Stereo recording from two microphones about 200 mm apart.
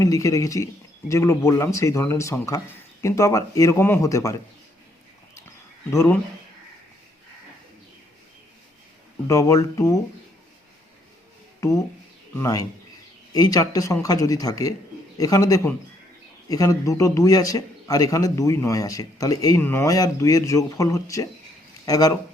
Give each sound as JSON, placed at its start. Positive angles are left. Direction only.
{"t": 0.0, "sound": "a man's voice", "side_deg": 15}
{"t": 5.9, "sound": "a man's voice", "side_deg": 15}
{"t": 9.2, "sound": "a man's voice", "side_deg": 15}
{"t": 12.4, "sound": "a man's voice", "side_deg": 20}